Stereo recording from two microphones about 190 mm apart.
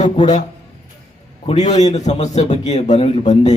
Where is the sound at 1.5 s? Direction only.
35° left (ahead or behind).